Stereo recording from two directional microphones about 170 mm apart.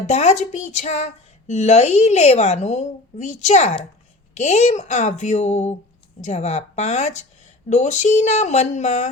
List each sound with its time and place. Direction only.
0.1 s speech: 40° left (ahead or behind)